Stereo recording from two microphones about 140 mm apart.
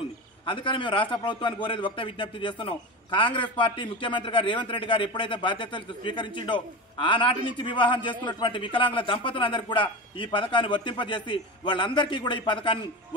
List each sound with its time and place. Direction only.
0.5 s a man's voice: 35° left (ahead or behind)